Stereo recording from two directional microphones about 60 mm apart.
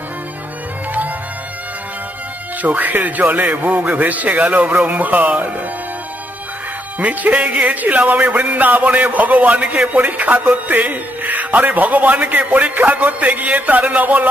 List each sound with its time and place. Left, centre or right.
2.6 s a man's voice: right
7.0 s a man's voice: right